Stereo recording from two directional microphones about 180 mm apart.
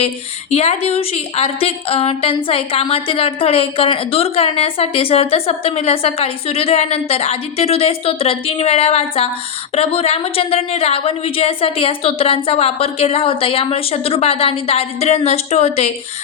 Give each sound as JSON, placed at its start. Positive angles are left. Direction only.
{"t": 0.5, "sound": "a woman's voice", "side_deg": 35}